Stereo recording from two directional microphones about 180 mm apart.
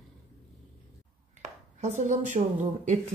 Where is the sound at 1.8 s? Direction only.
45° right (ahead or behind).